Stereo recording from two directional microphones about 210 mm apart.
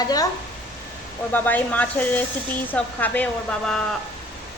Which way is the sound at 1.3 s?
10° left (ahead or behind).